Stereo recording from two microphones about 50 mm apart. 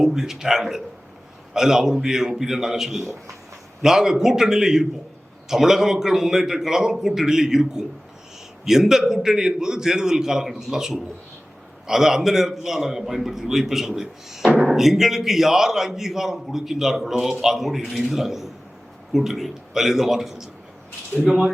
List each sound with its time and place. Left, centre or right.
0.0 s a man's voice: centre
3.0 s speech: right
3.8 s a man's voice: centre